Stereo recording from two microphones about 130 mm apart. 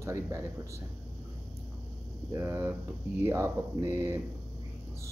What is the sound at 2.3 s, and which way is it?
Speech, 20° right (ahead or behind).